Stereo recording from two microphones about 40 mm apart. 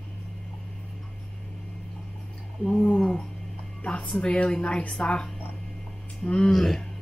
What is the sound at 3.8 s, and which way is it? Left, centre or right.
Music, left.